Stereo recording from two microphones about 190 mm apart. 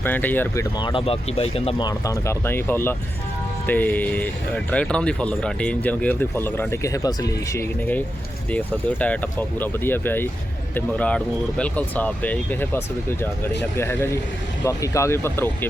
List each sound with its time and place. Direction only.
0.0 s speech: 10° left (ahead or behind); by 1.9 s 30° left (ahead or behind)
1.9 s speech: 15° left (ahead or behind)